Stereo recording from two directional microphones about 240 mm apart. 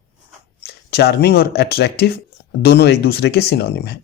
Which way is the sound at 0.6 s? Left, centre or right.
Left.